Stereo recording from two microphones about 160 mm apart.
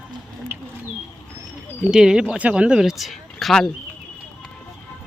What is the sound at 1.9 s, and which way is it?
Speech, 5° right (ahead or behind).